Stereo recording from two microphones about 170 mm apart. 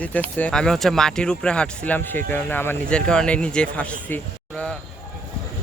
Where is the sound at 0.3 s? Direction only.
5° left (ahead or behind).